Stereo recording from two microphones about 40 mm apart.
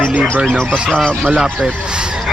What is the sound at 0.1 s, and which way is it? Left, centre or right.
Speech, right.